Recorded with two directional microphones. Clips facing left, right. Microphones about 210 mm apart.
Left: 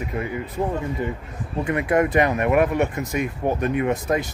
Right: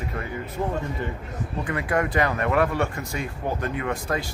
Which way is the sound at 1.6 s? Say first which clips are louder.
Left 6 dB; 25° left (ahead or behind).